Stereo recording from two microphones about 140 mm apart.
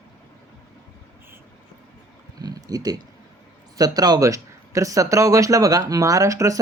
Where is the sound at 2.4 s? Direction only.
25° right (ahead or behind).